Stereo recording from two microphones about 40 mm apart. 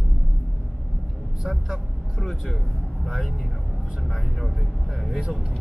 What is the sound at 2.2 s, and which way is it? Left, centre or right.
Vehicle, centre.